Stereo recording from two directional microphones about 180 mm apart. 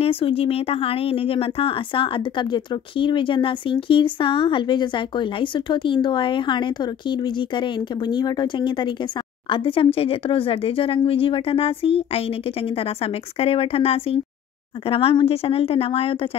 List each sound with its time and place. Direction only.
0.0 s speech: 30° left (ahead or behind)